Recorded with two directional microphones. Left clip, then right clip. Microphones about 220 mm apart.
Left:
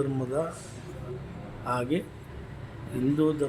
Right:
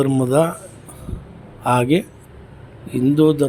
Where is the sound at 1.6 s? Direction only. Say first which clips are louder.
Right 12 dB; 35° right (ahead or behind).